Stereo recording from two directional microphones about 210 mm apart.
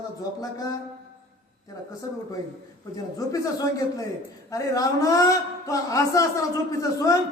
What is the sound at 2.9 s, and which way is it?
A man's voice, 15° left (ahead or behind).